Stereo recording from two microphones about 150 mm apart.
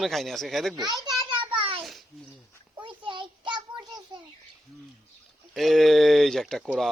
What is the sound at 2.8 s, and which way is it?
Child singing, 35° right (ahead or behind).